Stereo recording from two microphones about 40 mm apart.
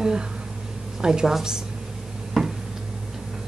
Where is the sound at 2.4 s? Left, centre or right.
Centre.